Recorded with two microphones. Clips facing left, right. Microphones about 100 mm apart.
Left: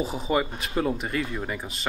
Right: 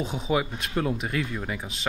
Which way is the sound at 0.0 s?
Centre (ahead or behind).